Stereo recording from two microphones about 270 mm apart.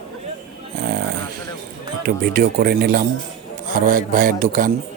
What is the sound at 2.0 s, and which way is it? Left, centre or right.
Speech, right.